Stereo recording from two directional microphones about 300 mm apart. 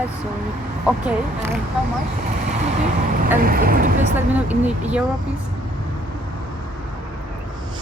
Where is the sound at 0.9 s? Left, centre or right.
Centre.